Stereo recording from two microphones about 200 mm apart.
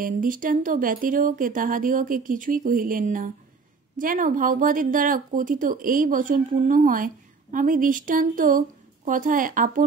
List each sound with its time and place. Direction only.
0.0 s speech: 40° right (ahead or behind)